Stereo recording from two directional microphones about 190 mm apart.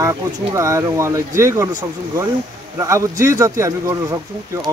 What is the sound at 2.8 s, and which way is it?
Speech, 15° right (ahead or behind).